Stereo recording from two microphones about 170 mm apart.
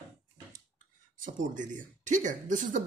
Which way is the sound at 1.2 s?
50° right (ahead or behind).